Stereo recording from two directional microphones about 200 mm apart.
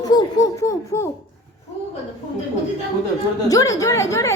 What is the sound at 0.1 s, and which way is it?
Speech, 15° left (ahead or behind).